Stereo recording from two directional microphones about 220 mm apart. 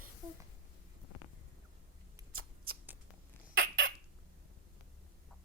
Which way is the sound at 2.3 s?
70° right (ahead or behind).